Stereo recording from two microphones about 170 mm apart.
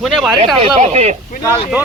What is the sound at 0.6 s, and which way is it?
Speech, 40° right (ahead or behind).